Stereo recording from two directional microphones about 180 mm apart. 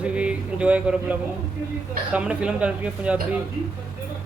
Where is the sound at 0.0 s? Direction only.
5° right (ahead or behind).